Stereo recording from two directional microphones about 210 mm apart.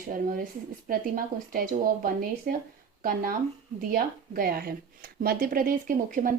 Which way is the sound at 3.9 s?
45° right (ahead or behind).